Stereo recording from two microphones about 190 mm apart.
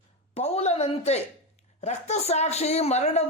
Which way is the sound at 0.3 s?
35° left (ahead or behind).